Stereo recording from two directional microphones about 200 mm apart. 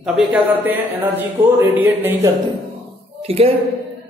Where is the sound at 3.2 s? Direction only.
30° right (ahead or behind).